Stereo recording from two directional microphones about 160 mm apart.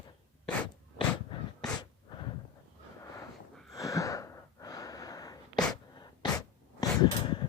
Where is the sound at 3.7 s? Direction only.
20° left (ahead or behind).